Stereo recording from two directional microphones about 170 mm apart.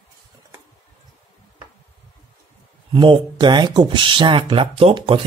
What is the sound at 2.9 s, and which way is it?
Speech, 30° right (ahead or behind).